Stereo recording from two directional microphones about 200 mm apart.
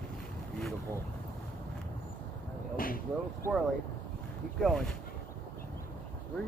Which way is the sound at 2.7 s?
45° left (ahead or behind).